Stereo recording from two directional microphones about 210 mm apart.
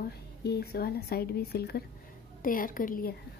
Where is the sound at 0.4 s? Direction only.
50° left (ahead or behind).